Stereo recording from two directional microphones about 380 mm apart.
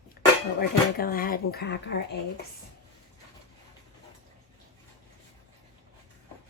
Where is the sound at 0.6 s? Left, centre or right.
Left.